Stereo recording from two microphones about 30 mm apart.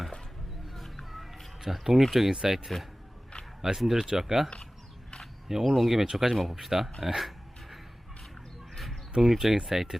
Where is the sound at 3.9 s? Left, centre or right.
Centre.